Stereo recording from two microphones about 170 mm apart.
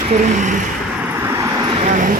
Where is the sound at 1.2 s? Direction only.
20° right (ahead or behind).